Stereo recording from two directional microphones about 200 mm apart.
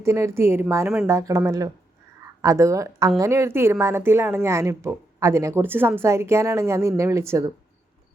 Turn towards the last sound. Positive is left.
turn(degrees=-15)  # may be behind; listen again after turning